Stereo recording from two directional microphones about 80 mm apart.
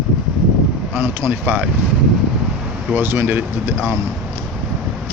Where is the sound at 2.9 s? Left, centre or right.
Right.